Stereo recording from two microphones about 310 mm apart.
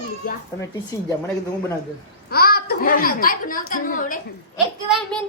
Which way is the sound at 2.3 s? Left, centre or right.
Left.